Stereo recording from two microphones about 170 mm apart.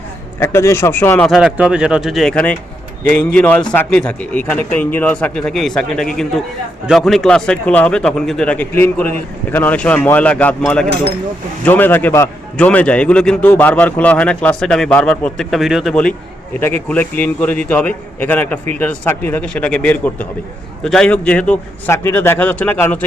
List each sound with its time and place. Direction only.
0.3 s a man's voice: 15° left (ahead or behind)
1.3 s a man's voice: 5° right (ahead or behind); by 23.0 s 10° left (ahead or behind)